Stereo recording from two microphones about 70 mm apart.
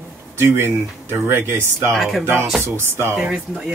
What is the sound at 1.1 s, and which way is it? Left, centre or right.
Speech, right.